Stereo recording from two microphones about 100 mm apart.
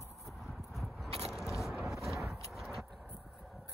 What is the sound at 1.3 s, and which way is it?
Scrape, centre (ahead or behind).